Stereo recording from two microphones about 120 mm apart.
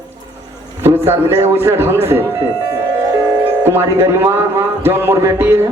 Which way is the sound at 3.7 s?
20° right (ahead or behind).